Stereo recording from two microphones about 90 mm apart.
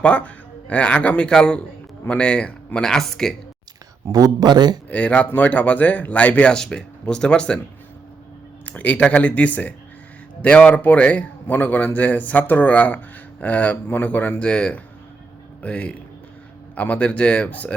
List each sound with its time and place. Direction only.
0.0 s speech: 15° left (ahead or behind)
4.1 s speech: 45° right (ahead or behind)
4.9 s speech: 15° left (ahead or behind)
8.6 s speech: 15° left (ahead or behind)